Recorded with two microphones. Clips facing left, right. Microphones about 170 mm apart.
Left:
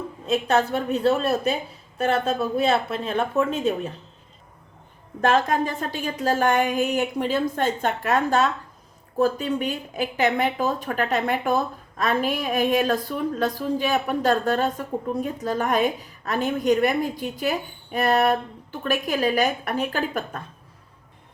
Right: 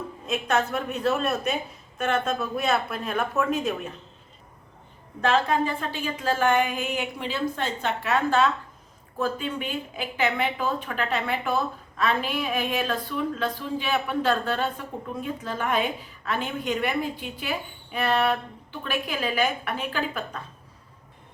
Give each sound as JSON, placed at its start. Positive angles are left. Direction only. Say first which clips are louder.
{"t": 0.3, "sound": "a woman's voice", "louder": "left 4 dB", "side_deg": 30}
{"t": 5.2, "sound": "a woman's voice", "louder": "left 2 dB", "side_deg": 45}